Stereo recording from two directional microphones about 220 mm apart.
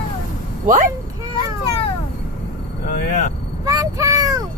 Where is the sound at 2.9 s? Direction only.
40° left (ahead or behind).